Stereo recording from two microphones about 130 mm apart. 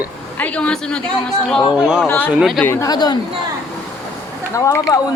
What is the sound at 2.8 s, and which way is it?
Speech, 30° left (ahead or behind).